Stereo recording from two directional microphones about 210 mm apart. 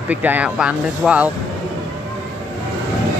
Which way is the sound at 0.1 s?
10° right (ahead or behind).